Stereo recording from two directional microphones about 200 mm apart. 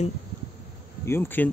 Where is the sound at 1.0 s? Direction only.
10° left (ahead or behind).